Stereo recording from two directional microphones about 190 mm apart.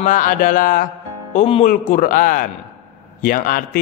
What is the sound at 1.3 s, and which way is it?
Speech, 35° left (ahead or behind).